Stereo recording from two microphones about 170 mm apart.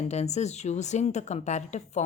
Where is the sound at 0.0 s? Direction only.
40° left (ahead or behind).